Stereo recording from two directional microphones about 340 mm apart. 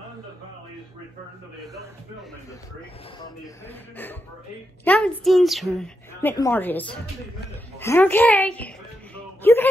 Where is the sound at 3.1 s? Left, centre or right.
Centre.